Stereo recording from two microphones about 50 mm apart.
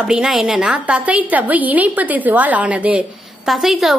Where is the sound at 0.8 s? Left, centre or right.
Right.